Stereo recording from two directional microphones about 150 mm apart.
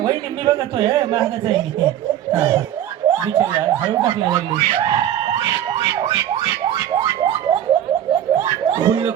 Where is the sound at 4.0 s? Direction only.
30° right (ahead or behind).